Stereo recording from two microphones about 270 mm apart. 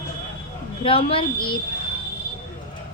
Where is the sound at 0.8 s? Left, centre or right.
Left.